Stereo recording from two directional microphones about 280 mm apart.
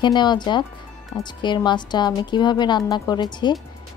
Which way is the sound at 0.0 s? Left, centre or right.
Centre.